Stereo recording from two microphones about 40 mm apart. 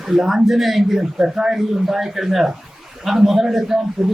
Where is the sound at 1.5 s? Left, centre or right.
Centre.